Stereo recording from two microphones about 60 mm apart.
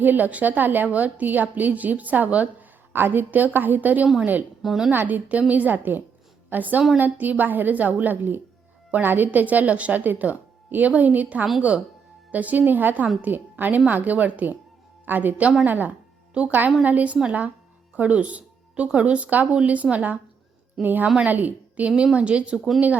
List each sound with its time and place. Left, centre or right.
0.0 s a woman's voice: right
4.6 s a woman's voice: centre
4.9 s a woman's voice: right